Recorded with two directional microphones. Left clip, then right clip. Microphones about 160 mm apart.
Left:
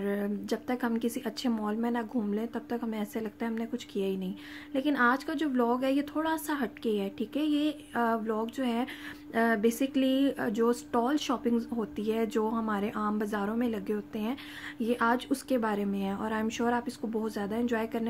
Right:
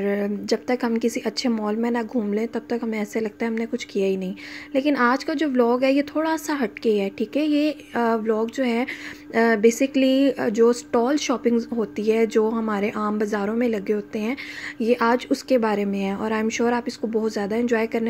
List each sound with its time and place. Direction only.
0.0 s a woman's voice: 20° right (ahead or behind)